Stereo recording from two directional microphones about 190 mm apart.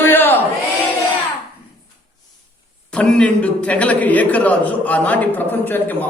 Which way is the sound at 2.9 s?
5° left (ahead or behind).